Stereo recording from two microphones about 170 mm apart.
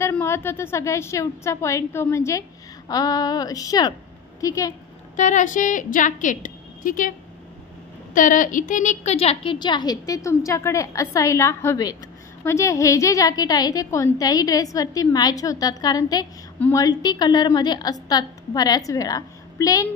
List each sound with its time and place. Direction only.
0.0 s a woman's voice: 15° left (ahead or behind)
5.1 s a woman's voice: 45° left (ahead or behind); by 19.9 s 20° left (ahead or behind)